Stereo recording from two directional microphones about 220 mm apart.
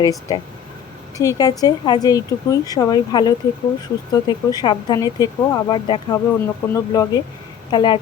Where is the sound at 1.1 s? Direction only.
15° left (ahead or behind).